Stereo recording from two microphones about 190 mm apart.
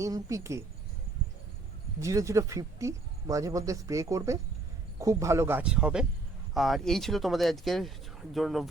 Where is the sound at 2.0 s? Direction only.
15° right (ahead or behind).